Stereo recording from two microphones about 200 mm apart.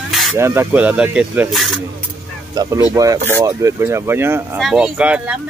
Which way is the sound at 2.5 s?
15° right (ahead or behind).